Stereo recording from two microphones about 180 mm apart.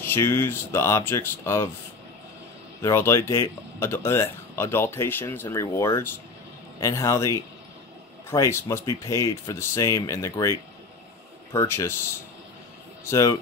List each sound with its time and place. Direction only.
0.0 s speech: 15° left (ahead or behind)
2.8 s speech: 15° left (ahead or behind)
11.5 s speech: 15° left (ahead or behind)
13.1 s speech: 15° left (ahead or behind)